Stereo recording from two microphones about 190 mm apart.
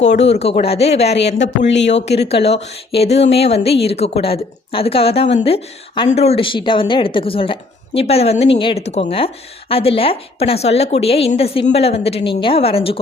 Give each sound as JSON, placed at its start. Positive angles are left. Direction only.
{"t": 0.3, "sound": "a woman's voice", "side_deg": 35}
{"t": 1.4, "sound": "speech", "side_deg": 70}
{"t": 2.9, "sound": "a woman's voice", "side_deg": 30}